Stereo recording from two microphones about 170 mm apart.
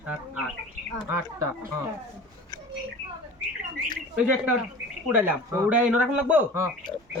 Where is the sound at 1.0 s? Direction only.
15° right (ahead or behind).